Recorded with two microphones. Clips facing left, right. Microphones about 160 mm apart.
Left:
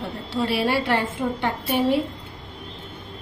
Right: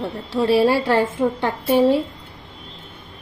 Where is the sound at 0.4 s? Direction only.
35° right (ahead or behind).